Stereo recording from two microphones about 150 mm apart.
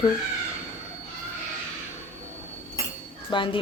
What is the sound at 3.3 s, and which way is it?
Speech, 35° left (ahead or behind).